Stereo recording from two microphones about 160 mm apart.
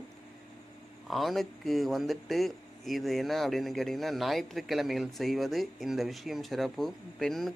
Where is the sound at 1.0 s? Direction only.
Centre (ahead or behind).